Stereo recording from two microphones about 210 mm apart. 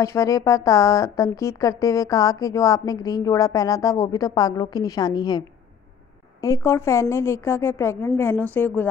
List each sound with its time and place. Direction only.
0.0 s a woman's voice: 15° left (ahead or behind)
6.4 s a woman's voice: 15° left (ahead or behind)